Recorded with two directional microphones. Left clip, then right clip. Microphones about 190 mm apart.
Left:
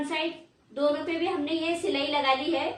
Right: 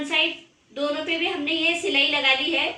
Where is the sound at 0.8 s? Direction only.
15° right (ahead or behind).